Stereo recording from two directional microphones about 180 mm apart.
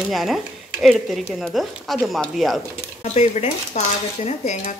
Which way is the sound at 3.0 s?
40° left (ahead or behind).